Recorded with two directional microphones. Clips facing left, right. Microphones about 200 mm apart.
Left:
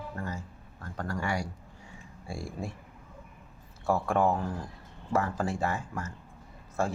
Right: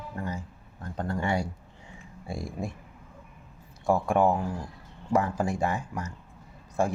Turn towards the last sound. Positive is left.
turn(degrees=-15)  # may be behind; listen again after turning